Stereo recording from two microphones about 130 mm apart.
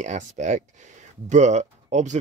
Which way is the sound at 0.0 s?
65° right (ahead or behind).